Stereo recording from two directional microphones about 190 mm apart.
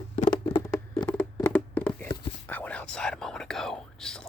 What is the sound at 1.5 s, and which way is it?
Hands, 5° left (ahead or behind).